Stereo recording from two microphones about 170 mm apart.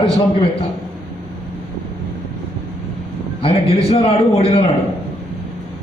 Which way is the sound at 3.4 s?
35° left (ahead or behind).